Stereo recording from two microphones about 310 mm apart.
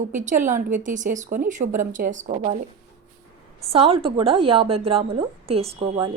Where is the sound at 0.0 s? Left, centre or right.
Right.